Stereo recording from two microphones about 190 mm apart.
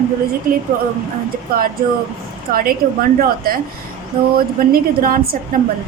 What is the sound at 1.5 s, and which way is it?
A woman's voice, 50° right (ahead or behind).